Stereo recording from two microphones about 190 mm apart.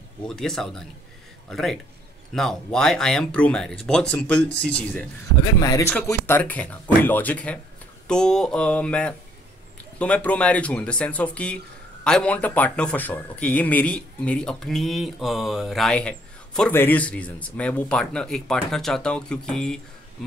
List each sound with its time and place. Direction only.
0.2 s speech: 5° left (ahead or behind)
4.5 s speech: 60° left (ahead or behind)
5.4 s speech: 15° left (ahead or behind)